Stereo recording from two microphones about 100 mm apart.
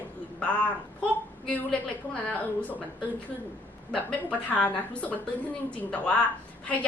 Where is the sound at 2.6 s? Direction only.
15° left (ahead or behind).